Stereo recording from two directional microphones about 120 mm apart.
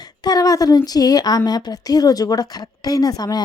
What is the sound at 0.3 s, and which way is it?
A woman's voice, 30° left (ahead or behind).